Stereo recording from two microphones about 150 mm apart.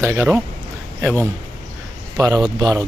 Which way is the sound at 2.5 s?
20° right (ahead or behind).